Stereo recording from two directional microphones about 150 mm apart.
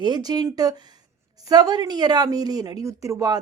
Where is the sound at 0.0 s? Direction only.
25° right (ahead or behind).